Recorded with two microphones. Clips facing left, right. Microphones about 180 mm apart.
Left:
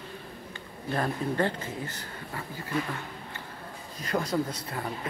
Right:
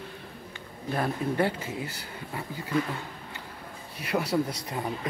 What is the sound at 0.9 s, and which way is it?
Speech, 10° right (ahead or behind).